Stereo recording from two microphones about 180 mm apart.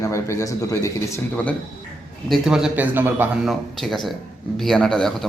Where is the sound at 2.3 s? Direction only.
5° right (ahead or behind).